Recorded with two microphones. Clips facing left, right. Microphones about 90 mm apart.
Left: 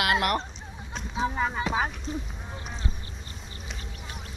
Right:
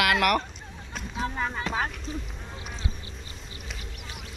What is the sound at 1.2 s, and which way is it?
Speech, 10° left (ahead or behind).